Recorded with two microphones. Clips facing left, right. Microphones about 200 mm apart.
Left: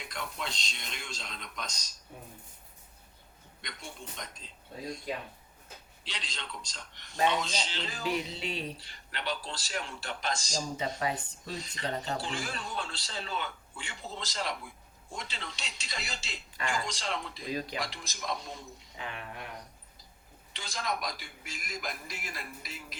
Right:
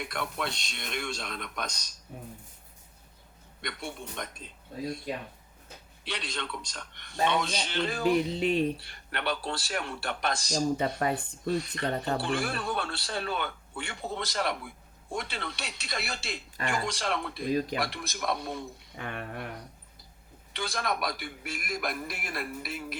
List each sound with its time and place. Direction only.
0.0 s a man's voice: 60° right (ahead or behind)
3.6 s a man's voice: 60° right (ahead or behind)
6.1 s a man's voice: 60° right (ahead or behind)
20.5 s a man's voice: 60° right (ahead or behind)